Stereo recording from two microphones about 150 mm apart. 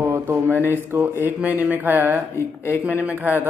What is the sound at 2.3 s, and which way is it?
Speech, 15° left (ahead or behind).